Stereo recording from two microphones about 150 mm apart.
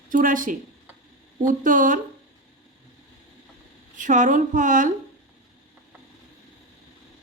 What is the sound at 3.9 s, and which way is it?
Speech, 60° right (ahead or behind).